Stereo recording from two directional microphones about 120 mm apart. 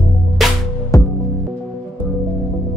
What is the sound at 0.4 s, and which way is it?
Music, centre (ahead or behind).